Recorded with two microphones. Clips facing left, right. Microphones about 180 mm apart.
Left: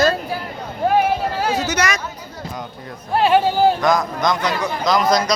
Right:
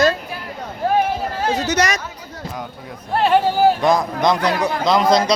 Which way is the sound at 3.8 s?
30° right (ahead or behind).